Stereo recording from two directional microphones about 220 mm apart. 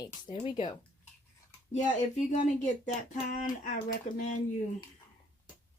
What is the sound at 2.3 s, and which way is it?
Speech, 35° left (ahead or behind).